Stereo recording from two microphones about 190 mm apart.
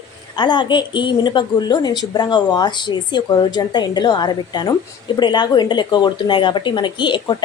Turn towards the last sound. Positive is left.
turn(degrees=25)  # may be behind; listen again after turning